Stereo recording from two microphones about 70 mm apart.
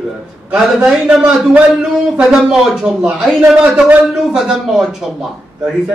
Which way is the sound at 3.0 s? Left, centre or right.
Centre.